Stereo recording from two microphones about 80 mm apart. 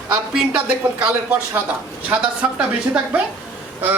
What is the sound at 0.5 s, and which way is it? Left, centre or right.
Speech, centre.